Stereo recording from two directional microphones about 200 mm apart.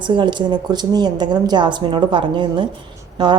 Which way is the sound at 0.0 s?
25° right (ahead or behind).